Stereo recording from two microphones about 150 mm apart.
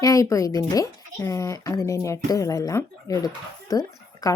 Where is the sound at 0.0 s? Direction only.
20° left (ahead or behind).